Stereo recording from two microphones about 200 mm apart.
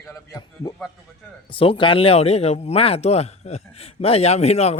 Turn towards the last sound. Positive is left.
turn(degrees=30)  # may be behind; listen again after turning